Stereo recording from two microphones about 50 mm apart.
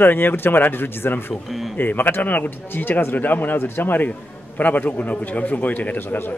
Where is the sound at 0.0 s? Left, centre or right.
Left.